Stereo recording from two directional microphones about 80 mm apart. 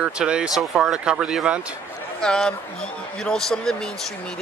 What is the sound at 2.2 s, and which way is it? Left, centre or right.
Speech, centre.